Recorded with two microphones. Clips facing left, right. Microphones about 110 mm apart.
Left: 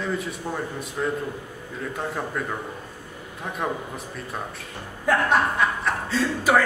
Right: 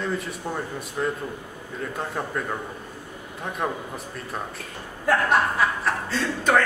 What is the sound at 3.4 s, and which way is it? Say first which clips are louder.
A man's voice: even; centre (ahead or behind).